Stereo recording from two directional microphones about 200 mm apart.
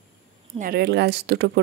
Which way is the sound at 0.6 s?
50° right (ahead or behind).